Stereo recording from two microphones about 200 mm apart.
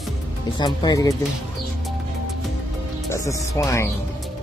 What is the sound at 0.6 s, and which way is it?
Speech, 20° left (ahead or behind).